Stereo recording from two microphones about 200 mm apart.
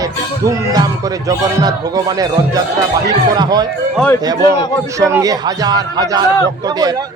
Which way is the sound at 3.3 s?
20° right (ahead or behind).